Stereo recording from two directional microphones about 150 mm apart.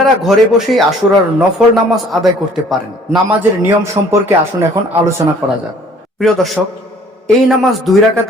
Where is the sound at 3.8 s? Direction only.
20° right (ahead or behind).